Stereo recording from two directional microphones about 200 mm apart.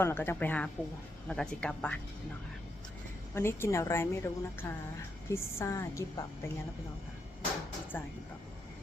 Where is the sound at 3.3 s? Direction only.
10° left (ahead or behind).